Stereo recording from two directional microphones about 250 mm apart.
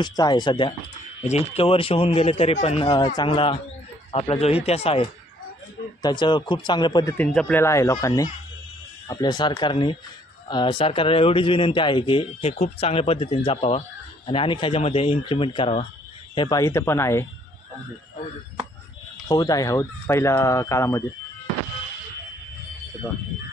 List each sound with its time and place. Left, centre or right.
0.0 s speech: centre
6.0 s speech: centre
19.2 s speech: centre